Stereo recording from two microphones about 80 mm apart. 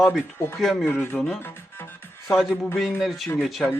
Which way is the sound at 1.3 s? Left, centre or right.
Left.